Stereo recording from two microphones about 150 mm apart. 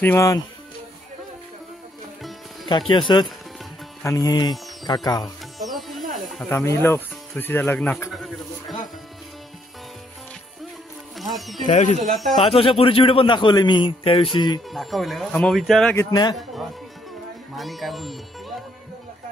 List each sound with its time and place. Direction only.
0.0 s speech: 15° left (ahead or behind)
2.9 s a man's voice: 30° left (ahead or behind)
4.0 s music: 25° left (ahead or behind)
5.2 s music: centre (ahead or behind)
6.5 s speech: 20° left (ahead or behind)
8.1 s a sound: centre (ahead or behind)
11.3 s speech: centre (ahead or behind)
11.7 s a man's voice: 50° left (ahead or behind); by 14.6 s 30° left (ahead or behind)
14.7 s speech: centre (ahead or behind)
16.0 s a man's voice: 25° left (ahead or behind)
17.6 s speech: centre (ahead or behind)